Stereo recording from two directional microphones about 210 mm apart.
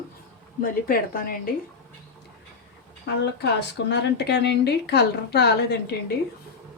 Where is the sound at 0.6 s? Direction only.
45° left (ahead or behind).